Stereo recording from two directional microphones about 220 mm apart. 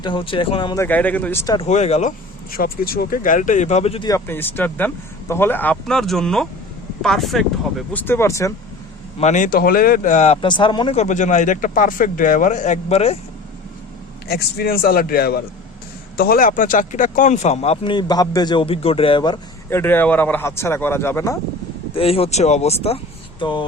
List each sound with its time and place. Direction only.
0.0 s speech: 20° left (ahead or behind)
0.9 s speech: 5° left (ahead or behind)
1.5 s speech: 30° left (ahead or behind)
4.1 s speech: 10° left (ahead or behind)
9.1 s speech: 30° left (ahead or behind)
10.3 s speech: 20° left (ahead or behind)
14.3 s a man's voice: 45° left (ahead or behind); by 21.3 s 10° left (ahead or behind)
21.9 s speech: 25° left (ahead or behind)